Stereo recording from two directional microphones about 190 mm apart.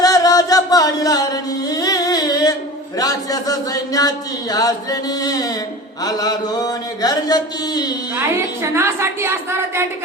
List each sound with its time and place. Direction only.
0.0 s music: 20° left (ahead or behind)
3.0 s speech: 20° left (ahead or behind)
8.1 s a woman's voice: 15° right (ahead or behind)